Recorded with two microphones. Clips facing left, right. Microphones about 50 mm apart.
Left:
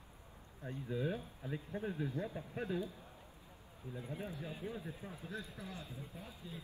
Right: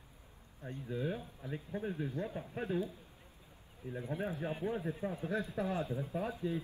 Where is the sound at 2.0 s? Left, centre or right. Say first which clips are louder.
Right 2 dB; right.